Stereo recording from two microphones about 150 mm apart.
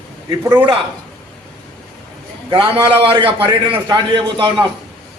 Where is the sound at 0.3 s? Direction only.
20° right (ahead or behind).